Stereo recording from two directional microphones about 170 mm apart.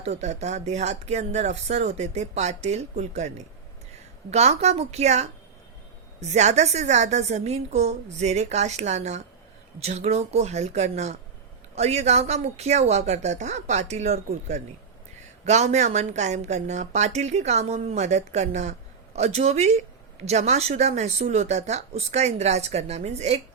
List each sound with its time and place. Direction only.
0.0 s a woman's voice: 40° right (ahead or behind)